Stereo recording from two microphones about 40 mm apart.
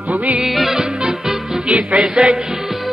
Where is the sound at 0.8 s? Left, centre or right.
Centre.